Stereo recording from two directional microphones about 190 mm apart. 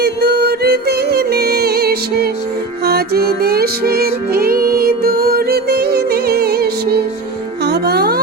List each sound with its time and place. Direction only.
0.0 s music: 55° right (ahead or behind)